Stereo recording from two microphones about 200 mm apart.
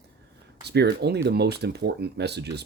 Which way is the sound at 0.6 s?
55° right (ahead or behind).